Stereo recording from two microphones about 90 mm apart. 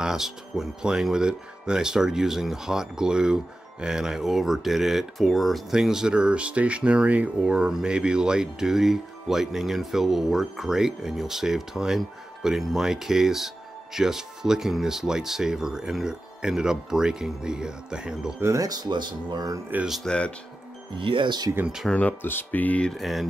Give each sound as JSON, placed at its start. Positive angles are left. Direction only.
{"t": 0.0, "sound": "speech", "side_deg": -5}
{"t": 18.4, "sound": "speech", "side_deg": -40}
{"t": 19.9, "sound": "speech", "side_deg": 5}
{"t": 20.9, "sound": "speech", "side_deg": -70}
{"t": 21.8, "sound": "speech", "side_deg": 15}
{"t": 22.8, "sound": "speech", "side_deg": 0}